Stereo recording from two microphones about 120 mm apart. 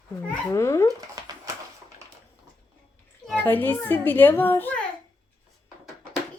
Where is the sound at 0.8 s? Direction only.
30° right (ahead or behind).